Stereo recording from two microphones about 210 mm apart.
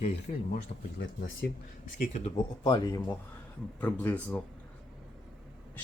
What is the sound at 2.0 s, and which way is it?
Speech, 35° left (ahead or behind).